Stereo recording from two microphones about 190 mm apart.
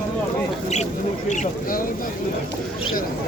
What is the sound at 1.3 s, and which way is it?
Speech, 45° left (ahead or behind).